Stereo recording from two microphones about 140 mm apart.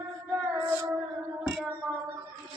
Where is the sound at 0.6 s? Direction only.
15° right (ahead or behind).